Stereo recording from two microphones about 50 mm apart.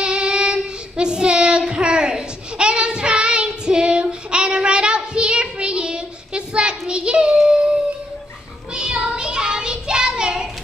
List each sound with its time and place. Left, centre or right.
0.0 s child singing: centre
8.7 s child singing: centre